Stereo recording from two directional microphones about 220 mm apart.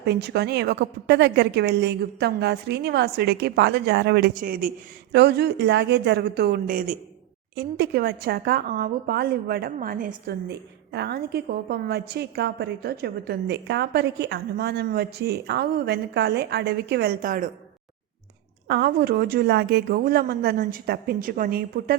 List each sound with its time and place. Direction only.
0.0 s a woman's voice: 50° right (ahead or behind)
18.7 s a woman's voice: 45° right (ahead or behind)